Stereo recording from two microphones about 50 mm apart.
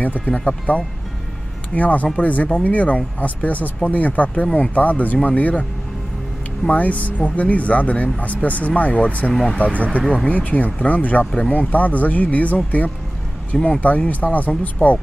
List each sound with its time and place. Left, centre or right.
0.0 s speech: left
6.7 s speech: left
9.3 s speech: centre
9.6 s speech: left